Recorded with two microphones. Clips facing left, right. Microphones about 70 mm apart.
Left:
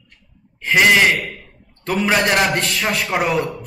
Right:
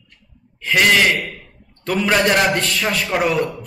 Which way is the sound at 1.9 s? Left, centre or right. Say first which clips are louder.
Right 1 dB; centre.